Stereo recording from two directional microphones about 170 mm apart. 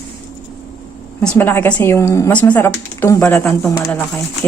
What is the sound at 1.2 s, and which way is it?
Speech, 10° left (ahead or behind).